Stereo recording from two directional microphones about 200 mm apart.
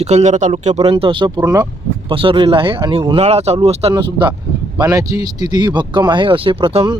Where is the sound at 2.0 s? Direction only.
25° right (ahead or behind).